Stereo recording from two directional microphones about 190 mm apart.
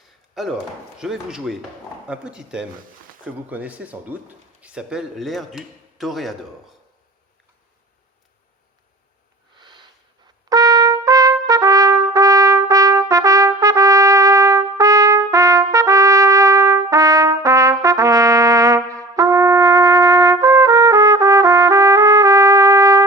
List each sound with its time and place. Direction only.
0.4 s speech: centre (ahead or behind)
9.6 s a sound: 25° right (ahead or behind)
10.5 s trumpet: 20° right (ahead or behind)